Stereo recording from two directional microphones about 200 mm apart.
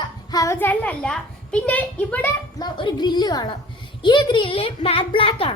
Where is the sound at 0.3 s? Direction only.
15° left (ahead or behind).